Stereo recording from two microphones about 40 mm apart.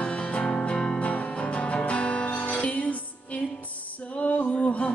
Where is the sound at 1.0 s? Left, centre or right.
Left.